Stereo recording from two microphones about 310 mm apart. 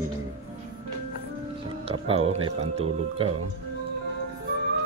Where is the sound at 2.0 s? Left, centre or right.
Centre.